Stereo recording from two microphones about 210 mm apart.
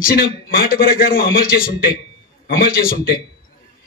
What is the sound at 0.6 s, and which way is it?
A man's voice, 45° left (ahead or behind).